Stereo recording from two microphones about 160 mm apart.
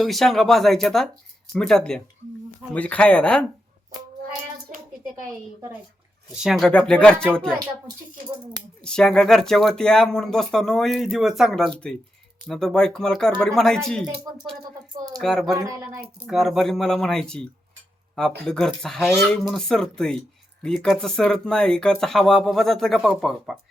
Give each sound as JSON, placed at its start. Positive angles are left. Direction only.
{"t": 0.0, "sound": "speech", "side_deg": 0}
{"t": 4.7, "sound": "a sound", "side_deg": -55}
{"t": 6.3, "sound": "speech", "side_deg": -5}
{"t": 8.8, "sound": "speech", "side_deg": 5}
{"t": 15.2, "sound": "speech", "side_deg": 0}
{"t": 15.5, "sound": "speech", "side_deg": -20}
{"t": 16.2, "sound": "speech", "side_deg": 0}